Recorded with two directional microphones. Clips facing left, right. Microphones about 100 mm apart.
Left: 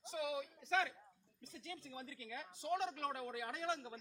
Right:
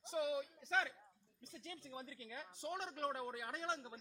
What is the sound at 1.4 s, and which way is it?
A woman's voice, 20° right (ahead or behind).